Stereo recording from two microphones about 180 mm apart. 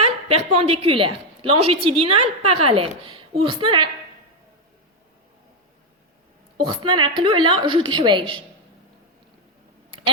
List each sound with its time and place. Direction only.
0.0 s a woman's voice: 35° right (ahead or behind)
6.6 s a woman's voice: 25° right (ahead or behind)